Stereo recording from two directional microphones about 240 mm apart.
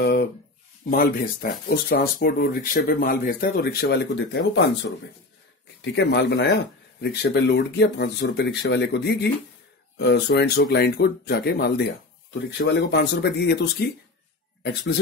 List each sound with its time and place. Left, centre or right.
0.0 s speech: left
5.9 s speech: left